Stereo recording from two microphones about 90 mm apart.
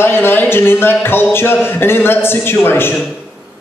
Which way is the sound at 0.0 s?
25° left (ahead or behind).